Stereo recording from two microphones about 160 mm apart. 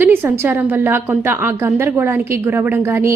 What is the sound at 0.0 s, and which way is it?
A woman's voice, 15° right (ahead or behind).